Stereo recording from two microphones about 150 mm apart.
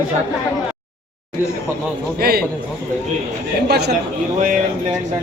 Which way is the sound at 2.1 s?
90° right.